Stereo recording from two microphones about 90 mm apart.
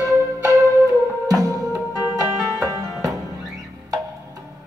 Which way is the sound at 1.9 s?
40° right (ahead or behind).